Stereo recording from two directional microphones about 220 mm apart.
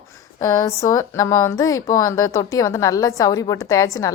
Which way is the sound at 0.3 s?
15° left (ahead or behind).